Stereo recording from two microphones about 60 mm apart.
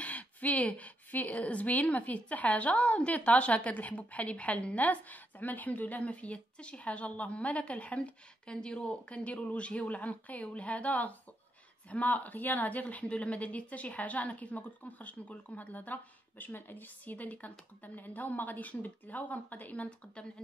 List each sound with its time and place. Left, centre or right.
0.0 s speech: left